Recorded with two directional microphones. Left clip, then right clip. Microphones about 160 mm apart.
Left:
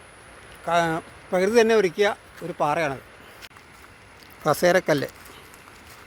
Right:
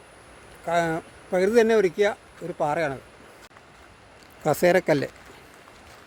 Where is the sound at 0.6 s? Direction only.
10° right (ahead or behind).